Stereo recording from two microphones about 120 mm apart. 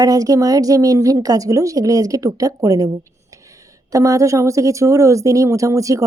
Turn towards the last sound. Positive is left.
turn(degrees=-25)  # may be behind; listen again after turning